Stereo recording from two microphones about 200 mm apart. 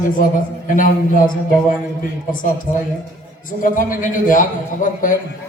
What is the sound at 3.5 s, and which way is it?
Speech, 40° left (ahead or behind).